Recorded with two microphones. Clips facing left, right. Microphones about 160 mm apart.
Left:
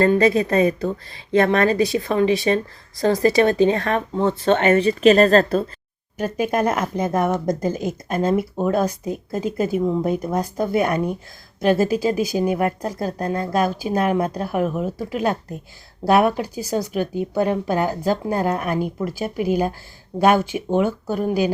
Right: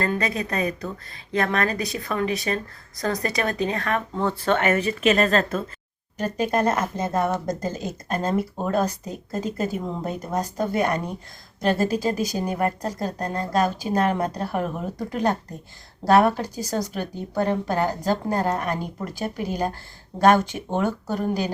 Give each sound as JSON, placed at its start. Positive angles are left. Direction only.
{"t": 0.0, "sound": "speech", "side_deg": 30}
{"t": 6.1, "sound": "speech", "side_deg": 10}